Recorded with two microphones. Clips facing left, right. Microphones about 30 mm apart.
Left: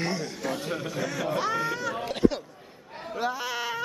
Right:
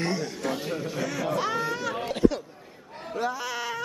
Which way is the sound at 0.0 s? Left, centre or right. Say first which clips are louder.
Right 2 dB; centre.